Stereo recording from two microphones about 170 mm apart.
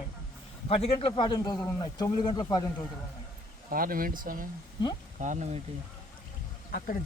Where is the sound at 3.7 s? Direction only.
55° right (ahead or behind).